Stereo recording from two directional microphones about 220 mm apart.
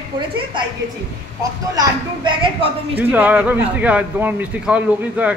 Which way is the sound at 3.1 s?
5° right (ahead or behind).